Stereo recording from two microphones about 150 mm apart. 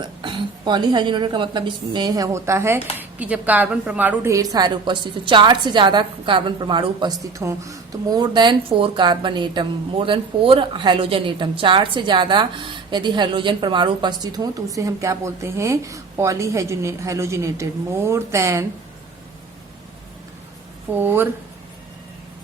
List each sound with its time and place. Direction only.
0.0 s a woman's voice: 35° right (ahead or behind)
7.3 s a woman's voice: 20° right (ahead or behind)
21.0 s speech: 15° right (ahead or behind)